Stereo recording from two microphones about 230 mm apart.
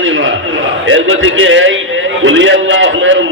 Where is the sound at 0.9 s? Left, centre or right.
Right.